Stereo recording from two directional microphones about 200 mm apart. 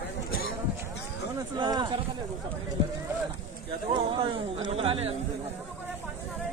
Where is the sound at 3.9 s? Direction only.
30° right (ahead or behind).